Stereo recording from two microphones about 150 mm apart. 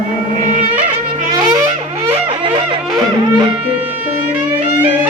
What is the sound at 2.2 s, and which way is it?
Music, 35° right (ahead or behind).